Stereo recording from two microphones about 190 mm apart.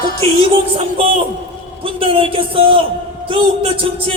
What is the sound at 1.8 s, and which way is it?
A man's voice, 30° right (ahead or behind).